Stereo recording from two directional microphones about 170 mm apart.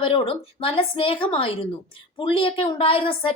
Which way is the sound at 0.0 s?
30° left (ahead or behind).